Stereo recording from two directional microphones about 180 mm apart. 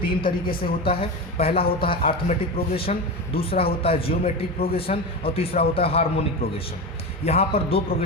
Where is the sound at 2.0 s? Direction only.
50° left (ahead or behind).